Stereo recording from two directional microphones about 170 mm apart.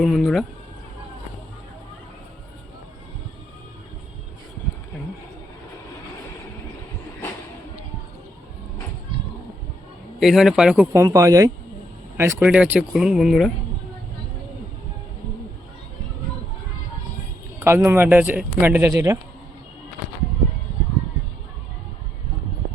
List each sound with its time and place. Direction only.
0.0 s speech: centre (ahead or behind)
10.2 s speech: centre (ahead or behind)
10.9 s speech: 20° right (ahead or behind); by 13.5 s centre (ahead or behind)
17.6 s speech: 15° right (ahead or behind)